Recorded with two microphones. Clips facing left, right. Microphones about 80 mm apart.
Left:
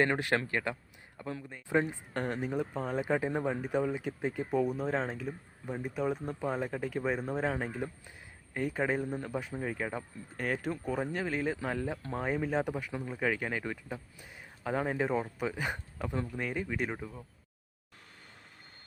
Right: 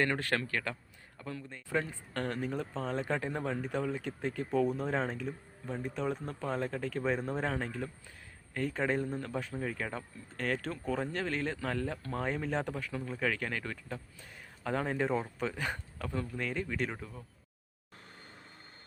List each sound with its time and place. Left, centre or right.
0.0 s speech: centre